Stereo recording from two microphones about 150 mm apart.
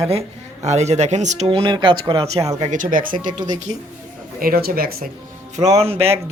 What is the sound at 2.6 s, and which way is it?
Speech, 60° right (ahead or behind).